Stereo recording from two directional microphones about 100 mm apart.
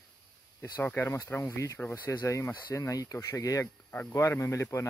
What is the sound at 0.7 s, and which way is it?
Speech, 20° left (ahead or behind).